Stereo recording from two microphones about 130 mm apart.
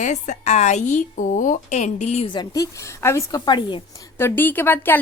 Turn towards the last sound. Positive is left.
turn(degrees=15)  # may be behind; listen again after turning